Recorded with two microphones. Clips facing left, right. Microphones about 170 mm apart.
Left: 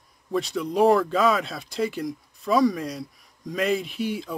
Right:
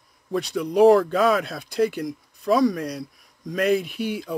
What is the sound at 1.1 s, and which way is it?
Speech, 50° right (ahead or behind).